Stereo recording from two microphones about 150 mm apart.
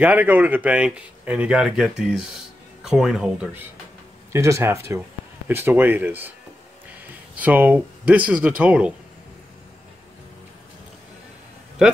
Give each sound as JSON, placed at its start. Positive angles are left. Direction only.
{"t": 0.0, "sound": "speech", "side_deg": -10}
{"t": 4.3, "sound": "speech", "side_deg": -20}
{"t": 7.3, "sound": "speech", "side_deg": -10}